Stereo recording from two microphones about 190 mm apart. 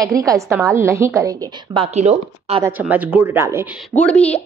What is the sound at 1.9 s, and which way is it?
Speech, 35° right (ahead or behind).